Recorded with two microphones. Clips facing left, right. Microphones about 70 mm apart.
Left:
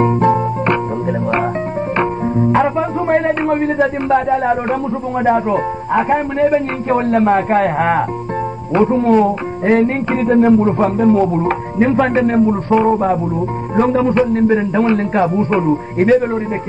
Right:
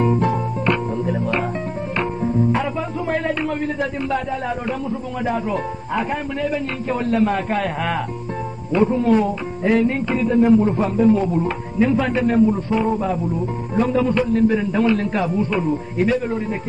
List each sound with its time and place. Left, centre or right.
0.0 s music: left
2.0 s music: left
4.1 s a man's voice: left
14.1 s a man's voice: left